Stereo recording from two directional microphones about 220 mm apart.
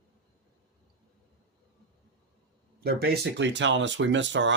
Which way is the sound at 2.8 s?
45° right (ahead or behind).